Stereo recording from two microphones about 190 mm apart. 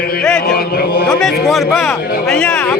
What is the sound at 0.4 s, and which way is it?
Chant, 50° left (ahead or behind).